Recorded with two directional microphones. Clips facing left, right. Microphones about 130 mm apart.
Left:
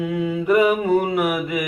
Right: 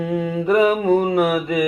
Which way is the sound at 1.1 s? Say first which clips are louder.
Right 3 dB; 5° left (ahead or behind).